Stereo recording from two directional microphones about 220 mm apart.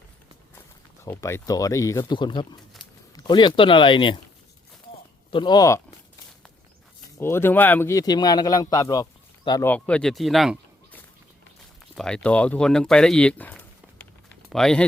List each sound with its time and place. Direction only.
1.0 s speech: 10° left (ahead or behind)
5.3 s speech: 20° left (ahead or behind)
7.2 s speech: 10° left (ahead or behind)
9.6 s speech: 5° left (ahead or behind)
11.9 s speech: 5° left (ahead or behind)